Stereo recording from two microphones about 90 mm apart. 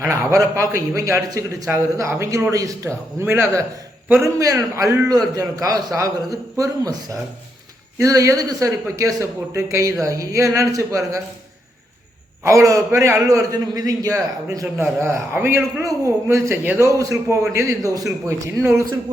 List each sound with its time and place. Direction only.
0.0 s a man's voice: 30° right (ahead or behind)
7.9 s a man's voice: 40° right (ahead or behind)
12.5 s a man's voice: 35° right (ahead or behind)
14.8 s a man's voice: 30° right (ahead or behind)
15.8 s a man's voice: 35° right (ahead or behind)
16.6 s a man's voice: 25° right (ahead or behind)
16.9 s a man's voice: 35° right (ahead or behind)